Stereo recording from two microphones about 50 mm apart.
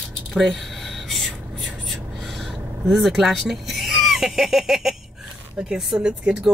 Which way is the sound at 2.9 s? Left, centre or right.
Centre.